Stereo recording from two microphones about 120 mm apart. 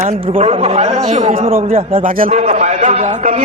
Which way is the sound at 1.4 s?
50° right (ahead or behind).